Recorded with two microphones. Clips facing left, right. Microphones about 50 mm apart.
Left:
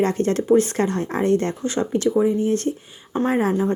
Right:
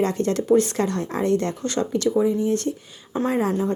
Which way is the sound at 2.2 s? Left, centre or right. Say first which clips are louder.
Left 1 dB; left.